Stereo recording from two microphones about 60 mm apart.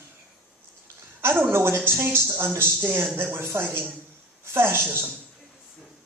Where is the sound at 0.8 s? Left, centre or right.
Right.